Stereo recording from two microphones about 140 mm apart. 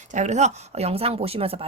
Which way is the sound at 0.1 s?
60° right (ahead or behind).